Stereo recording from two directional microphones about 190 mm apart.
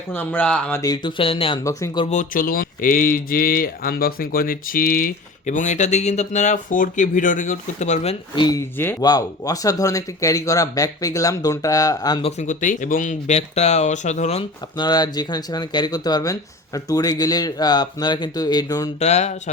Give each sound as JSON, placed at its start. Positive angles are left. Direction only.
{"t": 0.1, "sound": "speech", "side_deg": 10}
{"t": 0.8, "sound": "speech", "side_deg": 20}
{"t": 1.6, "sound": "speech", "side_deg": 15}
{"t": 2.0, "sound": "speech", "side_deg": 45}
{"t": 8.4, "sound": "speech", "side_deg": 20}
{"t": 12.4, "sound": "speech", "side_deg": 40}
{"t": 14.8, "sound": "speech", "side_deg": 20}
{"t": 18.9, "sound": "speech", "side_deg": 35}